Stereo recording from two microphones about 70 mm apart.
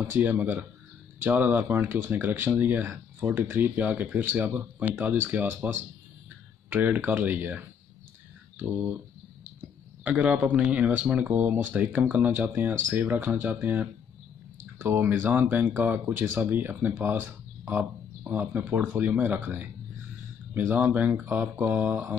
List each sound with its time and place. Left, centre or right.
0.1 s speech: right
1.7 s speech: right
10.0 s speech: centre